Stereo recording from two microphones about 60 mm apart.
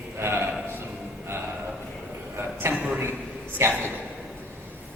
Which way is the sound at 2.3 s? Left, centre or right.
Right.